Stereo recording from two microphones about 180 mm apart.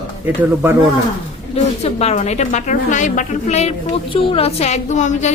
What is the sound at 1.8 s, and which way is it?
A woman's voice, 35° left (ahead or behind).